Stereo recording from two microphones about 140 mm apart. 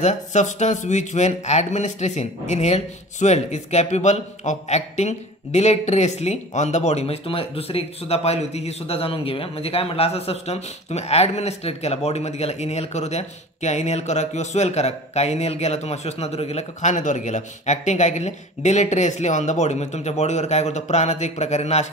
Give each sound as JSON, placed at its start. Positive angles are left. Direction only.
{"t": 0.0, "sound": "speech", "side_deg": 55}